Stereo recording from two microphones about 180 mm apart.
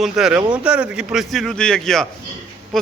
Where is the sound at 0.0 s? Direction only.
5° right (ahead or behind).